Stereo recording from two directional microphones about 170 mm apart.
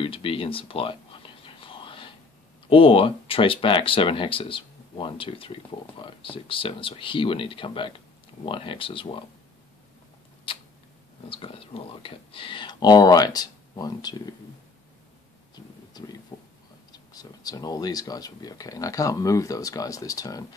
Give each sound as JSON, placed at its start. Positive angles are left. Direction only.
{"t": 0.0, "sound": "whispering", "side_deg": 30}
{"t": 2.7, "sound": "speech", "side_deg": 30}
{"t": 10.5, "sound": "a sound", "side_deg": 30}
{"t": 11.2, "sound": "speech", "side_deg": 30}
{"t": 15.5, "sound": "a sound", "side_deg": 25}
{"t": 16.9, "sound": "speech", "side_deg": 20}